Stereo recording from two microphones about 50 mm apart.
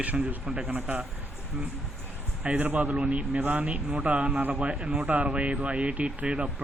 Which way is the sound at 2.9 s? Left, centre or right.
Centre.